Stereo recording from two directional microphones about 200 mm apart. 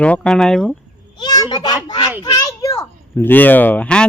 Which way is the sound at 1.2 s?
20° left (ahead or behind).